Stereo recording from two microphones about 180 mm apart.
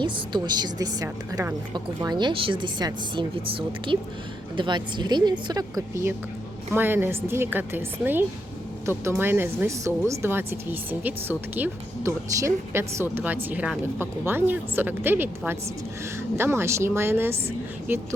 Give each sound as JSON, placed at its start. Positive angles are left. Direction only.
{"t": 0.0, "sound": "a woman's voice", "side_deg": -25}